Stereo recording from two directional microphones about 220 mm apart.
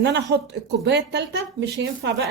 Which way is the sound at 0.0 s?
50° right (ahead or behind).